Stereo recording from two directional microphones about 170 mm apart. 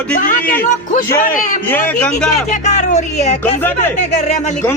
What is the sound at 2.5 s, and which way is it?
Speech, 45° left (ahead or behind).